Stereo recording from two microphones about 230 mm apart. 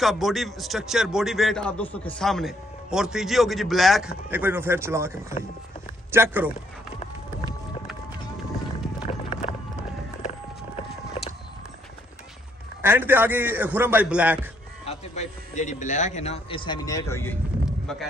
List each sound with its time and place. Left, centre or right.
0.0 s a man's voice: centre
6.1 s a man's voice: centre
9.0 s run: left
11.2 s a sound: left
12.8 s a man's voice: centre
14.9 s a man's voice: left; by 17.4 s centre
17.6 s a sound: centre